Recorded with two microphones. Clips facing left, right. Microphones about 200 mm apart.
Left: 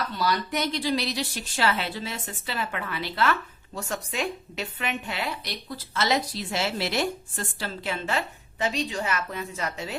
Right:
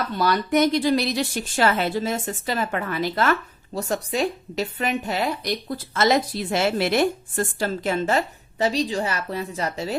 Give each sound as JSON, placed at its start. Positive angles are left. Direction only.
{"t": 0.2, "sound": "a woman's voice", "side_deg": -50}